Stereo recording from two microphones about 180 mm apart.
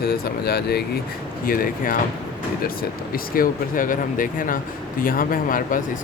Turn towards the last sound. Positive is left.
turn(degrees=50)  # may be behind; listen again after turning